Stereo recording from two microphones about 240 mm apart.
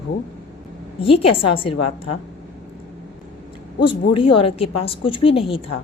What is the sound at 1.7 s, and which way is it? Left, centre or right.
Speech, left.